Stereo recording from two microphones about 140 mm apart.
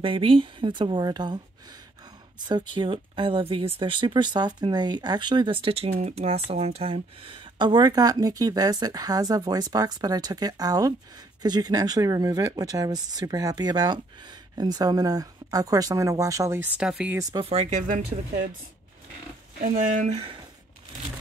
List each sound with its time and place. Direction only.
0.0 s speech: 40° right (ahead or behind); by 16.6 s 20° right (ahead or behind)
16.7 s speech: 5° right (ahead or behind)
17.4 s speech: 45° right (ahead or behind)
19.6 s speech: 70° right (ahead or behind)